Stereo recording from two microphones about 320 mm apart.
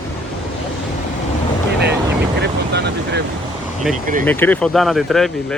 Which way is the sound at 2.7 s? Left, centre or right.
Right.